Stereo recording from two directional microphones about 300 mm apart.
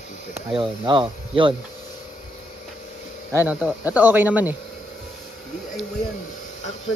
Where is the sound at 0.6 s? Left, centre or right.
Centre.